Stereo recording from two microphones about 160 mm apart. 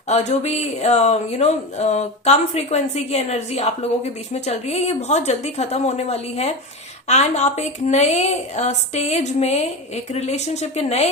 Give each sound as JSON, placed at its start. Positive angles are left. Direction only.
{"t": 0.1, "sound": "speech", "side_deg": 45}